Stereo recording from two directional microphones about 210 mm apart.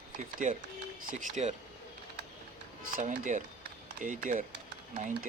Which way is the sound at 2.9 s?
40° right (ahead or behind).